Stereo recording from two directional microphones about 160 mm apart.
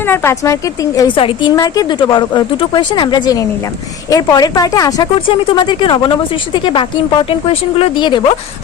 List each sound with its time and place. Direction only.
0.0 s speech: 15° left (ahead or behind)
1.1 s speech: 30° left (ahead or behind)